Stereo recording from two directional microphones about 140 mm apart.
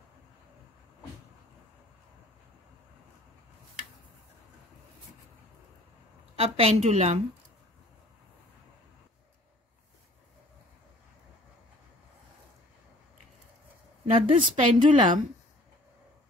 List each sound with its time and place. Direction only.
6.3 s a woman's voice: 45° right (ahead or behind)
14.1 s a woman's voice: 35° right (ahead or behind)